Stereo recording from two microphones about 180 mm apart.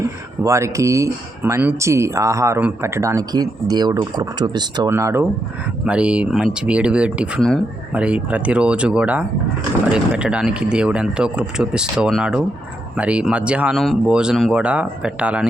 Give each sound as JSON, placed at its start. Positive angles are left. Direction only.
{"t": 0.0, "sound": "speech", "side_deg": -15}